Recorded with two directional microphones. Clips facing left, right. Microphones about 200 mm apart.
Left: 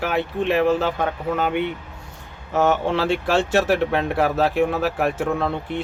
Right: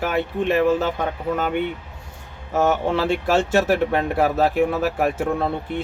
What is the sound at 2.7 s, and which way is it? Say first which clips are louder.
Speech: even; 45° right (ahead or behind).